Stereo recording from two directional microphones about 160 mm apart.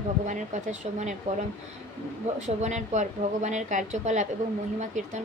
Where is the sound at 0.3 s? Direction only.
50° right (ahead or behind).